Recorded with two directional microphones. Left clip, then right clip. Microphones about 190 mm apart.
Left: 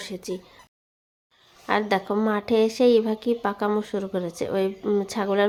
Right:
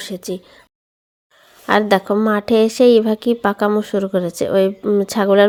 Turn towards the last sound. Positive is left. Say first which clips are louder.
# right 11 dB
turn(degrees=-30)  # may be behind; listen again after turning